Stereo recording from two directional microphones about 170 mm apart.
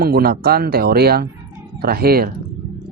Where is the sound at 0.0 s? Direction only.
65° right (ahead or behind).